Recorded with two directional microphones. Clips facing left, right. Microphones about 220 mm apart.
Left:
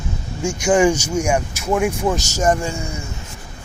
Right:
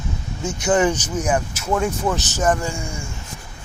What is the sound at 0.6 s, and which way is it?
Speech, 10° left (ahead or behind).